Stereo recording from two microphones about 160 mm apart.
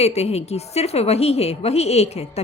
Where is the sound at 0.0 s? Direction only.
40° left (ahead or behind).